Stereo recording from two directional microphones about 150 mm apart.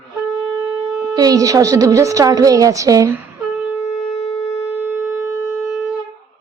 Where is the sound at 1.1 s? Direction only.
25° right (ahead or behind).